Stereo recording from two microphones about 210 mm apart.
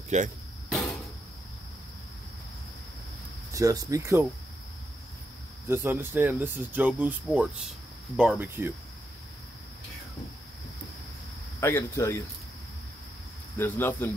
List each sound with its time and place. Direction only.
0.1 s speech: 35° right (ahead or behind)
3.5 s speech: 15° right (ahead or behind)
5.7 s speech: 10° right (ahead or behind)
11.6 s speech: 10° left (ahead or behind)
13.6 s speech: 10° left (ahead or behind)